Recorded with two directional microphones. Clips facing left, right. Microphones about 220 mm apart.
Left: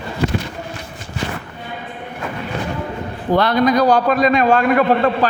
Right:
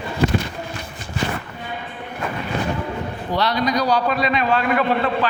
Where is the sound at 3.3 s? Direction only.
50° left (ahead or behind).